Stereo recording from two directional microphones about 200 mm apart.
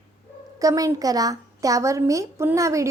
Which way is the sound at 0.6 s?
15° right (ahead or behind).